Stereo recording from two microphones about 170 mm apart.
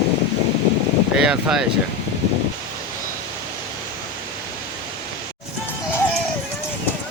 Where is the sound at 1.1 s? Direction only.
5° right (ahead or behind).